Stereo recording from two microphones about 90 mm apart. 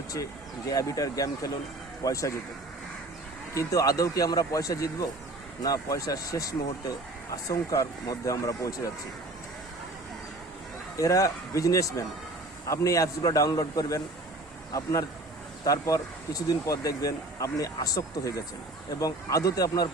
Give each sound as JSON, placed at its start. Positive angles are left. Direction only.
{"t": 0.7, "sound": "speech", "side_deg": 40}
{"t": 3.5, "sound": "speech", "side_deg": 35}
{"t": 10.9, "sound": "speech", "side_deg": 40}